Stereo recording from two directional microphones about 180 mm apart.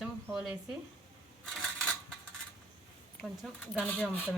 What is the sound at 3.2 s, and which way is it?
Speech, 5° left (ahead or behind).